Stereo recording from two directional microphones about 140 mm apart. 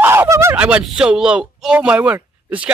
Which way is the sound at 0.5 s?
10° right (ahead or behind).